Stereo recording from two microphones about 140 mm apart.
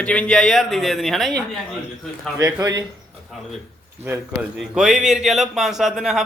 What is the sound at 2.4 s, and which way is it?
Speech, 30° right (ahead or behind).